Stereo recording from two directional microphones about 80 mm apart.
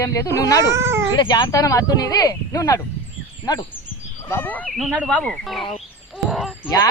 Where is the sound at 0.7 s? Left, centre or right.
Right.